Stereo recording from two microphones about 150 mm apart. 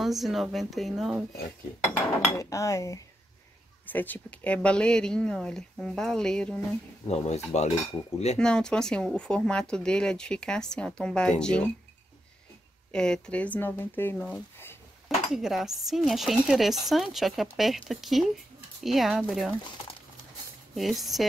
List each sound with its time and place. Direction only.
0.0 s speech: centre (ahead or behind)
1.9 s speech: 20° left (ahead or behind)
7.1 s cutlery: 45° left (ahead or behind)
8.4 s speech: 5° left (ahead or behind)
12.9 s speech: 5° left (ahead or behind)
15.3 s speech: centre (ahead or behind)
20.7 s speech: centre (ahead or behind)